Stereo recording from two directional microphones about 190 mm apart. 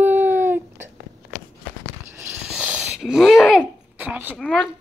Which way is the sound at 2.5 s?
5° right (ahead or behind).